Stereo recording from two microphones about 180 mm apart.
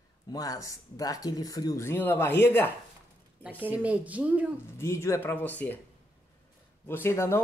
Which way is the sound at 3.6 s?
10° right (ahead or behind).